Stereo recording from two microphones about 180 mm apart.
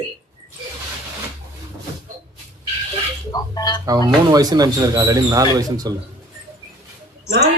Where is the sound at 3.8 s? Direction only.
20° right (ahead or behind).